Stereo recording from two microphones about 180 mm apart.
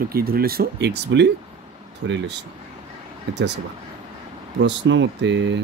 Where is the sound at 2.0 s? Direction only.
90° right.